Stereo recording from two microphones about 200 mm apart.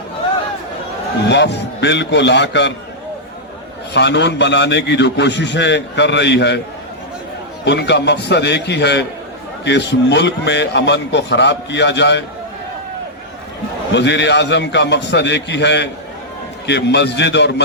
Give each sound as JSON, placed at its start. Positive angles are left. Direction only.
{"t": 1.3, "sound": "a man's voice", "side_deg": 60}
{"t": 3.9, "sound": "a man's voice", "side_deg": 60}
{"t": 7.6, "sound": "a man's voice", "side_deg": 60}
{"t": 13.9, "sound": "a man's voice", "side_deg": 60}